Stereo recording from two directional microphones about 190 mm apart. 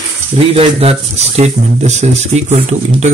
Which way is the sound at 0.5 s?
30° right (ahead or behind).